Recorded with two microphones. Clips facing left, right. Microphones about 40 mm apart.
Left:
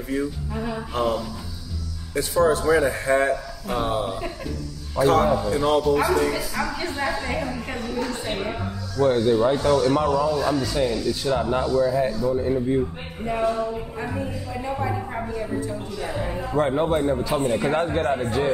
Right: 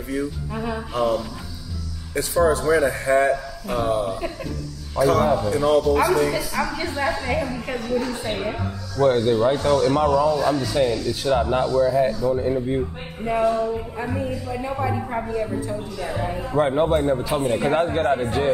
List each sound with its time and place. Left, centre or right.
0.6 s a man's voice: centre
2.1 s a woman's voice: centre
3.8 s speech: left
5.2 s a woman's voice: centre